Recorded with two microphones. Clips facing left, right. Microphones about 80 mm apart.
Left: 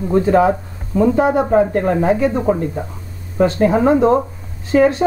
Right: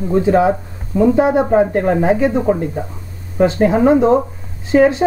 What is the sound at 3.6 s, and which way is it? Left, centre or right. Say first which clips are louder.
Speech: right 1 dB; centre.